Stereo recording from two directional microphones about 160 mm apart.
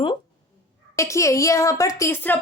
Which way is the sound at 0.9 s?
20° left (ahead or behind).